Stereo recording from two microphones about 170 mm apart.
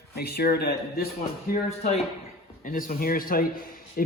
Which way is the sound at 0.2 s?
65° left (ahead or behind).